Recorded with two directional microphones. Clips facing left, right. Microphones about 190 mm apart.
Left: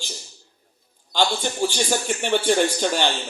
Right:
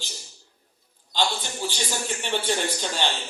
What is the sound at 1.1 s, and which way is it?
A man's voice, 45° left (ahead or behind).